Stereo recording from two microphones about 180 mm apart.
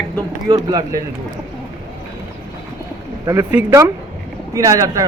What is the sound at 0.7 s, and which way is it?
Speech, 20° right (ahead or behind).